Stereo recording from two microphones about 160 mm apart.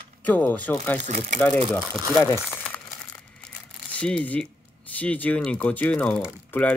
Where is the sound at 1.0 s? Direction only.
50° right (ahead or behind).